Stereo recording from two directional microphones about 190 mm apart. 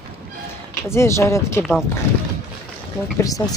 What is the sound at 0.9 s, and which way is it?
Speech, 15° left (ahead or behind).